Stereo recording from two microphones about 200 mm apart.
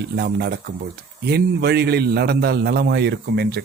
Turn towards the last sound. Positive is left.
turn(degrees=-55)  # may be behind; listen again after turning